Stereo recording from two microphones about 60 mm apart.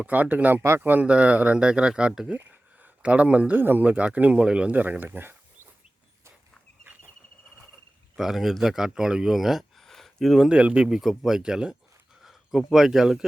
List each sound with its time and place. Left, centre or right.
0.0 s speech: right
2.3 s a sound: right
3.5 s speech: right; by 4.7 s centre
4.7 s speech: right
8.1 s speech: centre
10.5 s speech: centre
10.8 s speech: centre